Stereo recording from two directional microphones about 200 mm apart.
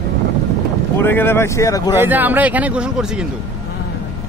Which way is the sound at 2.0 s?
10° right (ahead or behind).